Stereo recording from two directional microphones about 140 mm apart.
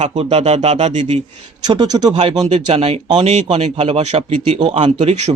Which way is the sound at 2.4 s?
45° right (ahead or behind).